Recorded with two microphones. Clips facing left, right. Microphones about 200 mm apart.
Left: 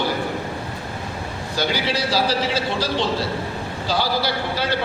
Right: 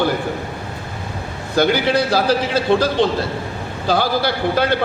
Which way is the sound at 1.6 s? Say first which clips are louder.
Right 8 dB; 55° right (ahead or behind).